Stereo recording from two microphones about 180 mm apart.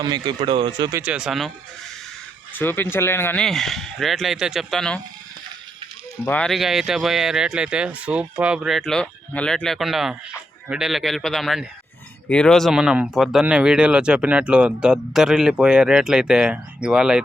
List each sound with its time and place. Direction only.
0.0 s speech: 25° right (ahead or behind)
1.0 s speech: 5° right (ahead or behind)
2.6 s speech: 10° left (ahead or behind)
6.2 s speech: 5° left (ahead or behind)